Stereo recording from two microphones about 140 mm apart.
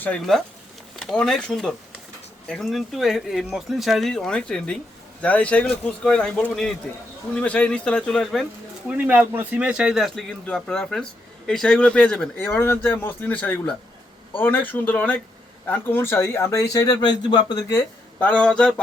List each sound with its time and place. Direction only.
0.0 s speech: 5° left (ahead or behind)
8.9 s speech: 10° right (ahead or behind); by 17.8 s 25° left (ahead or behind)
18.2 s speech: 10° left (ahead or behind)